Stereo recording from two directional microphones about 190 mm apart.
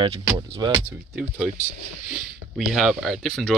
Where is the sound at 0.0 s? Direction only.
25° right (ahead or behind).